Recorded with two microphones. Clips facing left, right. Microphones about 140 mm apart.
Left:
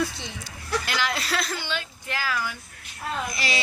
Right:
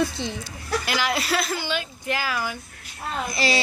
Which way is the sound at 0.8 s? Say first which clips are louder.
Right 3 dB; 10° right (ahead or behind).